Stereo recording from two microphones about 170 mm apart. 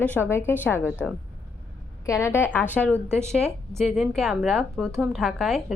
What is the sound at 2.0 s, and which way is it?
Speech, 15° left (ahead or behind).